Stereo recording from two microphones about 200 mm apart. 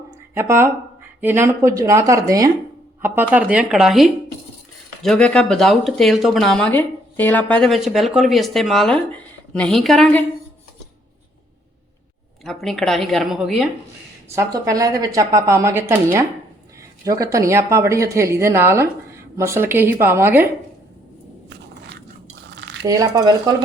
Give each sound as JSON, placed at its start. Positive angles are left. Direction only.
{"t": 0.3, "sound": "speech", "side_deg": -10}
{"t": 12.5, "sound": "speech", "side_deg": 0}
{"t": 14.3, "sound": "speech", "side_deg": -15}
{"t": 22.4, "sound": "cutlery", "side_deg": -65}
{"t": 22.9, "sound": "speech", "side_deg": -15}